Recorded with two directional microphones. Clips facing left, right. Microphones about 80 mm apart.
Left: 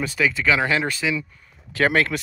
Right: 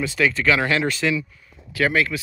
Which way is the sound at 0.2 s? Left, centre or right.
Centre.